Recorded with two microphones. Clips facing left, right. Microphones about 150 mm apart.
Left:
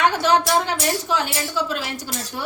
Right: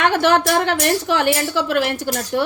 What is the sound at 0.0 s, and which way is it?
A woman's voice, 70° right (ahead or behind).